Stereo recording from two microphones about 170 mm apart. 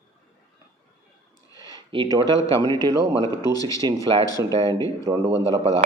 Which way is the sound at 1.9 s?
30° right (ahead or behind).